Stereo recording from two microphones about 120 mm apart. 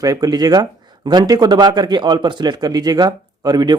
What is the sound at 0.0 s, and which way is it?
Speech, 30° right (ahead or behind).